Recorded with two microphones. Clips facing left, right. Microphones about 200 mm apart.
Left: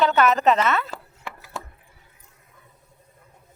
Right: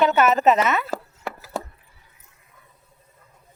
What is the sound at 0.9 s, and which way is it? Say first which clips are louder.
Chopping: right 7 dB; 40° right (ahead or behind).